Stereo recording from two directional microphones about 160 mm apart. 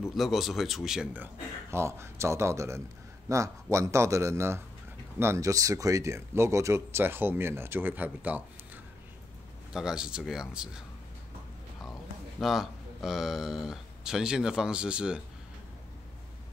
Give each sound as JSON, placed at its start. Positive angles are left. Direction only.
{"t": 0.1, "sound": "a man's voice", "side_deg": 0}
{"t": 9.7, "sound": "speech", "side_deg": -5}
{"t": 12.4, "sound": "speech", "side_deg": 0}